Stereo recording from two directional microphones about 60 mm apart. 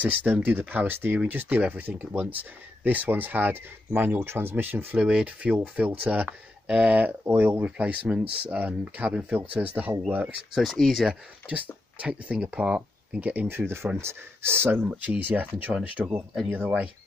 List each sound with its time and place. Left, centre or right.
0.0 s speech: right
5.0 s speech: centre
5.9 s speech: right
6.2 s speech: right
10.5 s speech: centre
11.4 s speech: right
13.2 s speech: right
13.5 s speech: right
15.7 s speech: right